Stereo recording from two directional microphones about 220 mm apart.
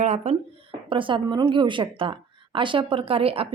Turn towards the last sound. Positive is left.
turn(degrees=-25)  # may be behind; listen again after turning